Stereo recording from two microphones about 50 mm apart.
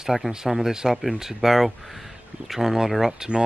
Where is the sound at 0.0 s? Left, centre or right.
Centre.